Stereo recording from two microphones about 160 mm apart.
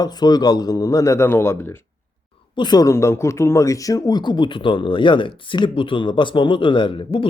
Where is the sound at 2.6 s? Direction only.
25° left (ahead or behind).